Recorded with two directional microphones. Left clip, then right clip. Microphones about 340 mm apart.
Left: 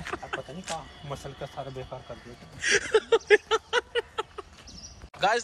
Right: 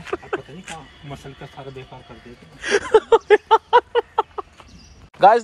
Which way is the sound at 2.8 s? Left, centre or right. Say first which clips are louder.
Right 12 dB; centre.